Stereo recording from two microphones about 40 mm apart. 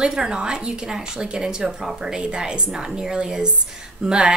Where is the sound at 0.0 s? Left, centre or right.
Centre.